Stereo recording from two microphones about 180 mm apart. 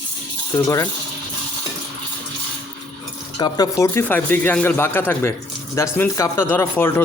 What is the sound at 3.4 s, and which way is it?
Speech, 20° left (ahead or behind).